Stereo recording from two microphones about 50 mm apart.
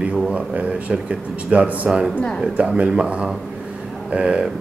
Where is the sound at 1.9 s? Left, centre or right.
Centre.